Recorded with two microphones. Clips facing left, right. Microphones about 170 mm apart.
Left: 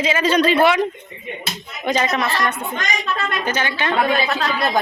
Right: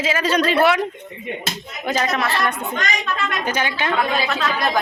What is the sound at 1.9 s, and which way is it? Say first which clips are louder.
A woman's voice: left 1 dB; centre (ahead or behind).